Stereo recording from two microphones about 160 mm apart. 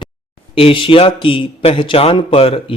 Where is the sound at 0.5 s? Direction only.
35° left (ahead or behind).